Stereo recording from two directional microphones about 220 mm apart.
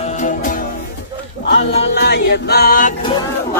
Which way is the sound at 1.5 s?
50° left (ahead or behind).